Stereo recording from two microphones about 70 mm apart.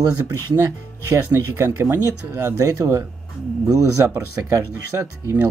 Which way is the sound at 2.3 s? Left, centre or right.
Right.